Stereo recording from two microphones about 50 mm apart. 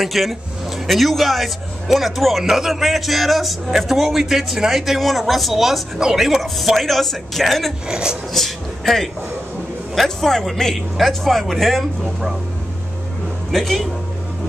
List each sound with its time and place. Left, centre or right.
0.0 s a man's voice: centre
7.9 s speech: centre
8.3 s a man's voice: centre
13.5 s a man's voice: centre